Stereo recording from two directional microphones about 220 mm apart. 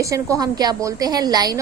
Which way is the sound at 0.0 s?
15° right (ahead or behind).